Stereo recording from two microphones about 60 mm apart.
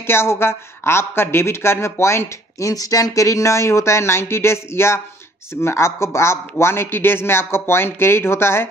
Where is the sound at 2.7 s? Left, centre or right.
Left.